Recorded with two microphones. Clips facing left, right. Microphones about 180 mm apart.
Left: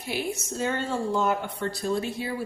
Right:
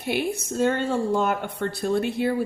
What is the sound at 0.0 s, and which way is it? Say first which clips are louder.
Speech: right 5 dB; 65° right (ahead or behind).